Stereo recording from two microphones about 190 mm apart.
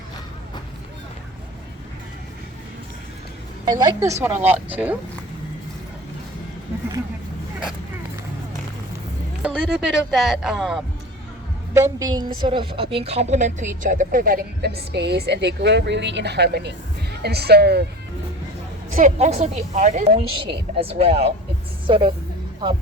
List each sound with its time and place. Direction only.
3.7 s a woman's voice: 20° right (ahead or behind)
9.4 s speech: 5° right (ahead or behind)
11.7 s a woman's voice: 15° right (ahead or behind); by 17.8 s 60° right (ahead or behind)
18.9 s a woman's voice: 40° right (ahead or behind)